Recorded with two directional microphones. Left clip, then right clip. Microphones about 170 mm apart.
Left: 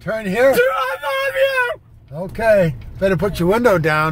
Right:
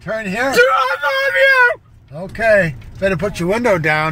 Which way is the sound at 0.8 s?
15° right (ahead or behind).